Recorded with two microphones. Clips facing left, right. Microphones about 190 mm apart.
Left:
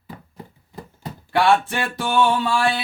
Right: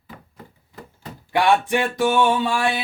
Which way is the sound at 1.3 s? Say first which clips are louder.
Even; 15° right (ahead or behind).